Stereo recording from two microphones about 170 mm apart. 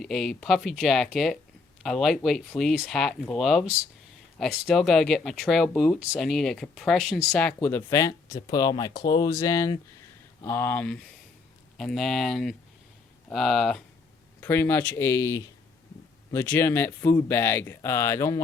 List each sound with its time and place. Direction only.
0.0 s speech: 5° left (ahead or behind)
14.4 s speech: 15° left (ahead or behind)